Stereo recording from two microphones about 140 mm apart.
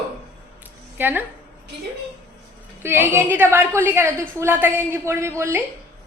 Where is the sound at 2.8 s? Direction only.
15° right (ahead or behind).